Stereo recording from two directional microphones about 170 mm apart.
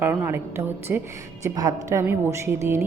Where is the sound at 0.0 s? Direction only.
15° right (ahead or behind).